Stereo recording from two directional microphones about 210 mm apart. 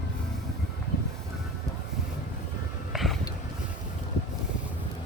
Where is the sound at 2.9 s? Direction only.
Centre (ahead or behind).